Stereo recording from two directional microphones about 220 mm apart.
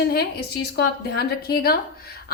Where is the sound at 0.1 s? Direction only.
45° left (ahead or behind).